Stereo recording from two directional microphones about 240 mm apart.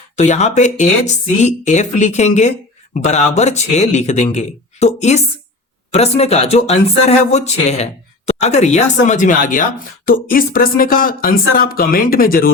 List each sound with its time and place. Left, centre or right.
0.2 s speech: left